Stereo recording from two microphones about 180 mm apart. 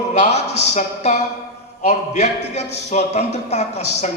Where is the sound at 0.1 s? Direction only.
40° left (ahead or behind).